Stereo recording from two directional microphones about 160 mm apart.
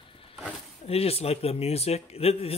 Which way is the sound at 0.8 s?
40° left (ahead or behind).